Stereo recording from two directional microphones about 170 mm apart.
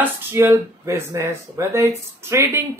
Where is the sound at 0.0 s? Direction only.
15° right (ahead or behind).